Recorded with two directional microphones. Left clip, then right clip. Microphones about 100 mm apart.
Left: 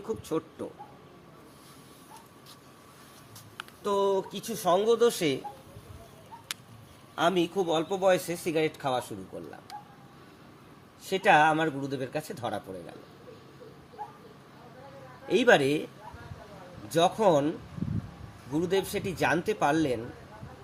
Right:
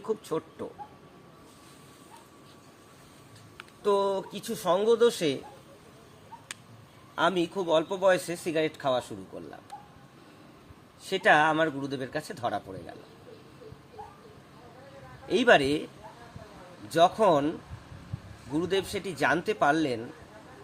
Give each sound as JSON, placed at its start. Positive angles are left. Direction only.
{"t": 0.1, "sound": "speech", "side_deg": -35}
{"t": 3.8, "sound": "speech", "side_deg": -30}
{"t": 7.2, "sound": "speech", "side_deg": -35}
{"t": 11.0, "sound": "speech", "side_deg": -40}
{"t": 15.3, "sound": "speech", "side_deg": -40}
{"t": 16.9, "sound": "speech", "side_deg": -40}
{"t": 18.5, "sound": "speech", "side_deg": -35}